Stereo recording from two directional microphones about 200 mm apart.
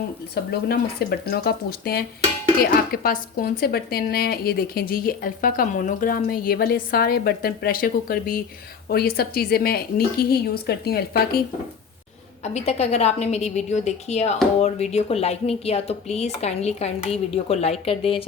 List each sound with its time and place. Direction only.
0.4 s a woman's voice: 55° left (ahead or behind)
12.4 s speech: 30° left (ahead or behind)